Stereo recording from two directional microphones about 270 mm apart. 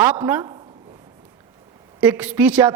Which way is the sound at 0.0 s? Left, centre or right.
Centre.